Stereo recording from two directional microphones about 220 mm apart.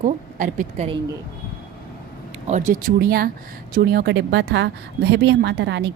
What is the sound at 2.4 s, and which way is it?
A woman's voice, 35° right (ahead or behind).